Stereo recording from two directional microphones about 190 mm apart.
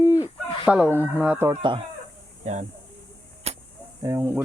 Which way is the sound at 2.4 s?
35° right (ahead or behind).